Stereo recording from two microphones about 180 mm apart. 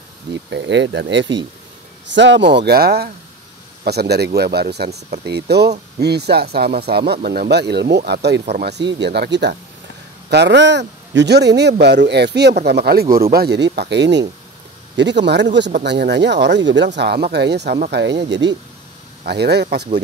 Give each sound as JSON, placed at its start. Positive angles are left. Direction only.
{"t": 0.5, "sound": "speech", "side_deg": -80}
{"t": 10.3, "sound": "speech", "side_deg": -75}